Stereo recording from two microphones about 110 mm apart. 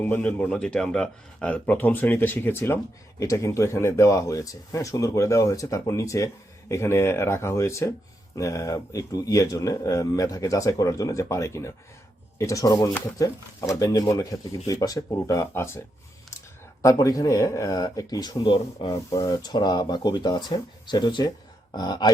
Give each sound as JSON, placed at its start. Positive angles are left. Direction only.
{"t": 0.0, "sound": "a man's voice", "side_deg": 15}
{"t": 16.8, "sound": "speech", "side_deg": 30}
{"t": 19.1, "sound": "speech", "side_deg": 35}